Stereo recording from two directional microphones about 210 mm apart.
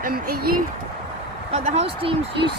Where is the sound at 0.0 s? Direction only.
45° right (ahead or behind).